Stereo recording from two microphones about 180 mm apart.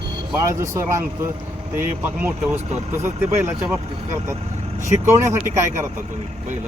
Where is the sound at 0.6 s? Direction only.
15° right (ahead or behind).